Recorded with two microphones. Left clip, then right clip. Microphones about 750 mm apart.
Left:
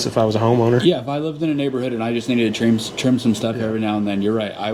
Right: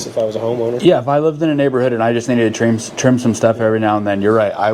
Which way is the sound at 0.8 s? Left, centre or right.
Right.